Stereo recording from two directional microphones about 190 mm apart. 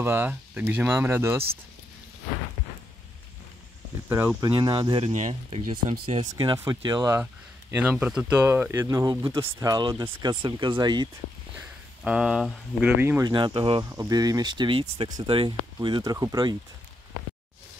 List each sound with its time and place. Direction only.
0.0 s speech: 10° right (ahead or behind)
4.1 s speech: 15° right (ahead or behind)
4.5 s speech: 25° right (ahead or behind)
5.1 s speech: 40° right (ahead or behind)
6.0 s speech: 25° right (ahead or behind)
12.0 s speech: 5° right (ahead or behind)
13.3 s speech: 25° right (ahead or behind)